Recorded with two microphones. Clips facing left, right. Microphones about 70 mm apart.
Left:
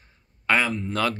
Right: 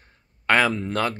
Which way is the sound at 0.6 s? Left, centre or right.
Right.